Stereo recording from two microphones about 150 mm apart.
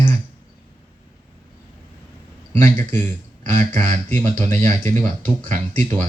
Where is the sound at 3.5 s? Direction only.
55° right (ahead or behind).